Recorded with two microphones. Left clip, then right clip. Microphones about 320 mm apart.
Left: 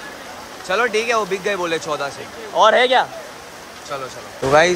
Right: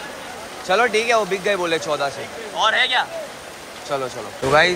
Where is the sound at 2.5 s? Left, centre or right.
Left.